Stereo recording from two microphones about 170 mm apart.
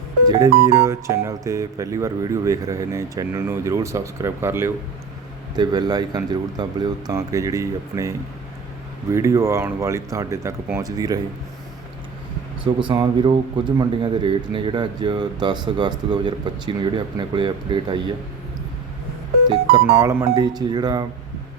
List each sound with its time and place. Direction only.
0.3 s speech: 20° right (ahead or behind)
9.1 s speech: 15° right (ahead or behind)
12.6 s speech: 25° right (ahead or behind)
20.0 s speech: 15° right (ahead or behind)